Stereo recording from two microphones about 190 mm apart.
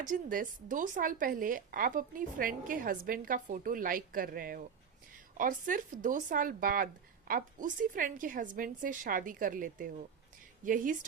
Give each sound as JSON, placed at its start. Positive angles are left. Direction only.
{"t": 0.0, "sound": "speech", "side_deg": -45}